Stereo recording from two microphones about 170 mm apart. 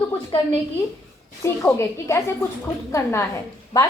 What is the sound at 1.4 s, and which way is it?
A woman's voice, 15° left (ahead or behind).